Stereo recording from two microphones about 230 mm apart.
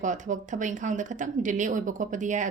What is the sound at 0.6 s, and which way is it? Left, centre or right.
Speech, right.